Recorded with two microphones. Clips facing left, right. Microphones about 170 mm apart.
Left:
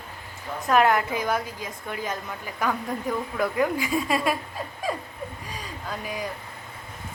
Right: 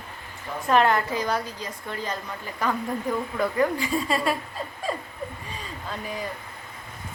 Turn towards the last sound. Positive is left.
turn(degrees=5)  # may be behind; listen again after turning